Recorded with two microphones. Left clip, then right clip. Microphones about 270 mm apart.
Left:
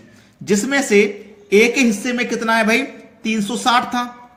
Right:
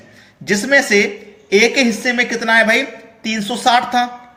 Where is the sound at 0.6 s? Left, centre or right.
Left.